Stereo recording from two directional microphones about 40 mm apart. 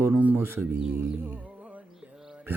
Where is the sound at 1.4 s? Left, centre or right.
Right.